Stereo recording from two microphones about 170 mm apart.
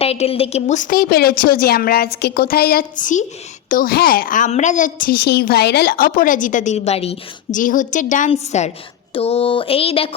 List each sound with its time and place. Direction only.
0.0 s a woman's voice: 35° left (ahead or behind)